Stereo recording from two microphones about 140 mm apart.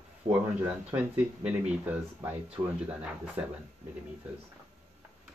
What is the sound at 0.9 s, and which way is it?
Speech, 10° right (ahead or behind).